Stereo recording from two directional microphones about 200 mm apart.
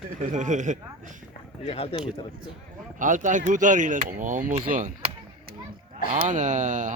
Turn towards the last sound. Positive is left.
turn(degrees=-40)  # may be behind; listen again after turning